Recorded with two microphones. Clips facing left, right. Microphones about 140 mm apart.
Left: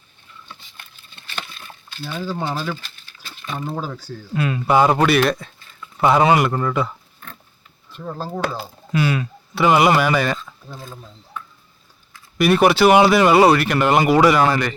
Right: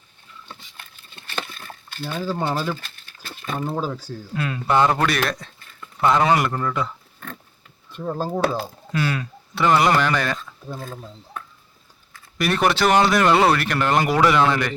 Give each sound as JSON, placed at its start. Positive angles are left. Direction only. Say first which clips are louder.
{"t": 2.5, "sound": "speech", "louder": "right 1 dB", "side_deg": 0}
{"t": 2.8, "sound": "crumpling", "louder": "right 1 dB", "side_deg": -50}
{"t": 3.7, "sound": "speech", "louder": "right 2 dB", "side_deg": 0}
{"t": 4.4, "sound": "speech", "louder": "left 3 dB", "side_deg": 10}
{"t": 7.9, "sound": "speech", "louder": "right 3 dB", "side_deg": -15}
{"t": 8.5, "sound": "speech", "louder": "left 2 dB", "side_deg": 10}
{"t": 10.7, "sound": "speech", "louder": "right 5 dB", "side_deg": -55}
{"t": 12.4, "sound": "speech", "louder": "left 6 dB", "side_deg": 10}